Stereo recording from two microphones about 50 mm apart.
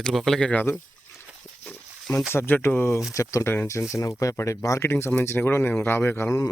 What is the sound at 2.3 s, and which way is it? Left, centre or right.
Speech, left.